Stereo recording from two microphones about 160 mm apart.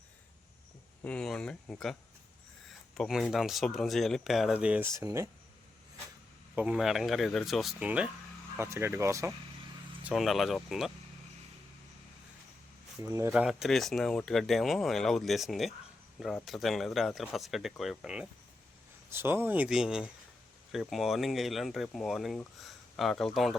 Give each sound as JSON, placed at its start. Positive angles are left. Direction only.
{"t": 1.0, "sound": "speech", "side_deg": 5}
{"t": 3.0, "sound": "speech", "side_deg": 0}
{"t": 6.6, "sound": "speech", "side_deg": -5}
{"t": 10.0, "sound": "speech", "side_deg": -5}
{"t": 13.0, "sound": "speech", "side_deg": -15}
{"t": 13.3, "sound": "speech", "side_deg": -5}